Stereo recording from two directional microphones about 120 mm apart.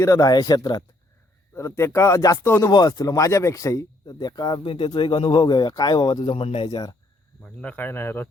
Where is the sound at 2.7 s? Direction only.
35° left (ahead or behind); by 6.7 s 55° left (ahead or behind).